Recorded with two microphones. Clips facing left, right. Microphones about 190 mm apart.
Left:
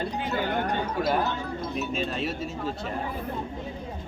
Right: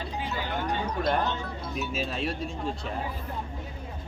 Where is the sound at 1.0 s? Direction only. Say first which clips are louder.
Right 1 dB; 5° left (ahead or behind).